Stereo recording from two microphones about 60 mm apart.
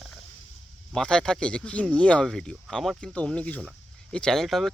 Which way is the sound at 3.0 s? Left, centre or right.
Centre.